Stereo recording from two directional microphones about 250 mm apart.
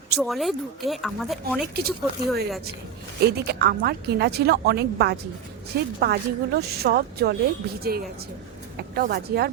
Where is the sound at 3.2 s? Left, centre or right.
Right.